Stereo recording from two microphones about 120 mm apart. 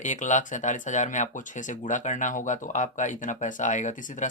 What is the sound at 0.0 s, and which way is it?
Speech, 90° left.